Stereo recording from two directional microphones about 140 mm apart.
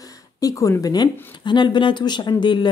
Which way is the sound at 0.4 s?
25° left (ahead or behind).